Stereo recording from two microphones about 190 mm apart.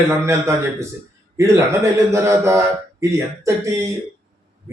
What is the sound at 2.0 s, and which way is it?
A man's voice, 15° right (ahead or behind).